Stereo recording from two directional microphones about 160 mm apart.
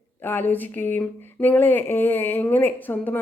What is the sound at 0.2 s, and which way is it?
Speech, 10° left (ahead or behind).